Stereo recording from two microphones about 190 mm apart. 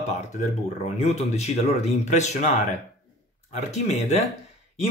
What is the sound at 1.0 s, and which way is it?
Speech, 35° left (ahead or behind).